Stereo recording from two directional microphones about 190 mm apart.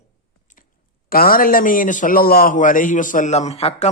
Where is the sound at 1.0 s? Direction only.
50° left (ahead or behind).